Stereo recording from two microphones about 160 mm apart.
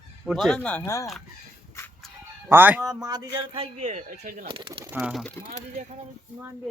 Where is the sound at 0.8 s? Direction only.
20° left (ahead or behind).